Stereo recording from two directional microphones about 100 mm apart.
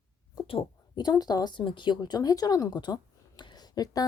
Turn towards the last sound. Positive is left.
turn(degrees=40)  # may be behind; listen again after turning